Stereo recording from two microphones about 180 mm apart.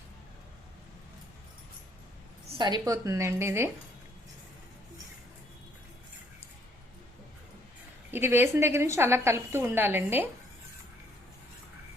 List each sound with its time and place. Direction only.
2.5 s a woman's voice: 25° right (ahead or behind)
8.1 s a woman's voice: 10° right (ahead or behind)